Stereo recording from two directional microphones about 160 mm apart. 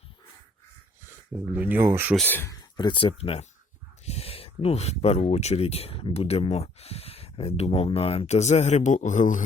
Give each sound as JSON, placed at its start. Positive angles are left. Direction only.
{"t": 1.5, "sound": "speech", "side_deg": -10}
{"t": 2.2, "sound": "speech", "side_deg": 15}
{"t": 2.6, "sound": "speech", "side_deg": 30}